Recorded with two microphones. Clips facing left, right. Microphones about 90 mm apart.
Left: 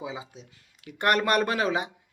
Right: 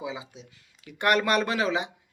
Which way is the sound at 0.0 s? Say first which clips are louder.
Right 1 dB; 35° left (ahead or behind).